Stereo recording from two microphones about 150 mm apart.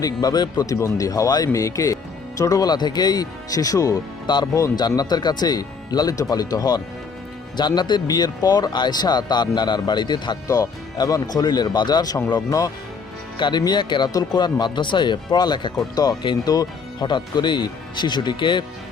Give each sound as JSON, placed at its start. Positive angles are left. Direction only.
{"t": 0.0, "sound": "speech", "side_deg": 25}